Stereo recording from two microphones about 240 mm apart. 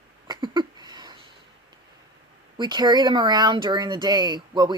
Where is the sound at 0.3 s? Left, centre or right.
Centre.